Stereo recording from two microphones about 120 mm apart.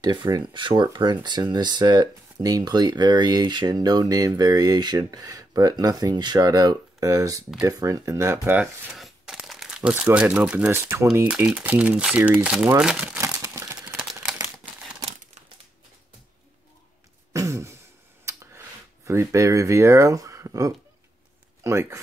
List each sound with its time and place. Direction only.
0.3 s speech: 40° right (ahead or behind); by 8.5 s 25° right (ahead or behind)
8.9 s crumpling: centre (ahead or behind)
10.7 s speech: 20° right (ahead or behind)
11.2 s speech: 10° right (ahead or behind)
13.2 s crumpling: 20° right (ahead or behind)
17.3 s throat clearing: 25° right (ahead or behind)
19.0 s speech: 25° right (ahead or behind)